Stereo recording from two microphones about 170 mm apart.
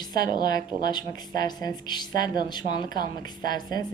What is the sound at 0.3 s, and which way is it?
Speech, 25° left (ahead or behind).